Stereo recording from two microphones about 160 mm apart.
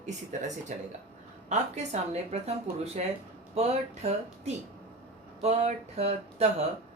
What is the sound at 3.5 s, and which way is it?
A woman's voice, 45° right (ahead or behind).